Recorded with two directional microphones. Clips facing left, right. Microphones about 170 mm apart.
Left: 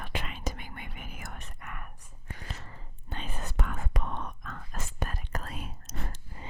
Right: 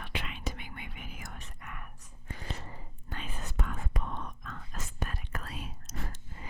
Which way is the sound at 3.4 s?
70° left (ahead or behind).